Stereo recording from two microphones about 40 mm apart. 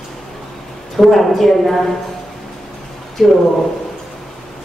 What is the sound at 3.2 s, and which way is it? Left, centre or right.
Speech, centre.